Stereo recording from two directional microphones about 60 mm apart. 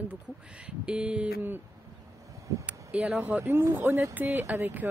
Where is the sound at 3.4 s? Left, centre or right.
Right.